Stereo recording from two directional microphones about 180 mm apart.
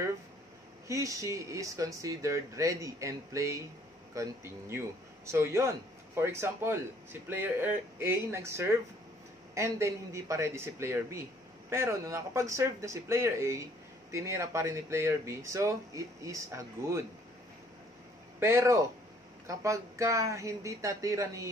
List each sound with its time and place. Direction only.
0.8 s speech: 15° right (ahead or behind)
18.4 s speech: 15° right (ahead or behind)